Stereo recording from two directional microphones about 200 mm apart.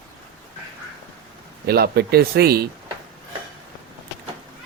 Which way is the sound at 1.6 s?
50° right (ahead or behind).